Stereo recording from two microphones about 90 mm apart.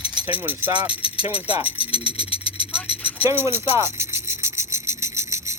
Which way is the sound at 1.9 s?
90° left.